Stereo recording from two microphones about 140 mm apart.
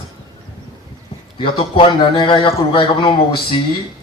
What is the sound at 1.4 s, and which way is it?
Speech, 40° left (ahead or behind).